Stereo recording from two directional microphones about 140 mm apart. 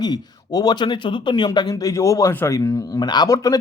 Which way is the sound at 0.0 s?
30° left (ahead or behind).